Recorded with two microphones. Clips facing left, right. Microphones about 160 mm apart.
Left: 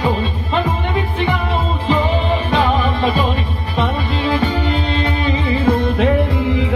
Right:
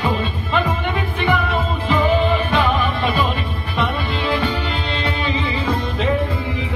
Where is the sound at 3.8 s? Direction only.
40° left (ahead or behind).